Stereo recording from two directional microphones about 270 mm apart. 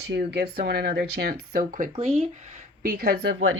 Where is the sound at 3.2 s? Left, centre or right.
Right.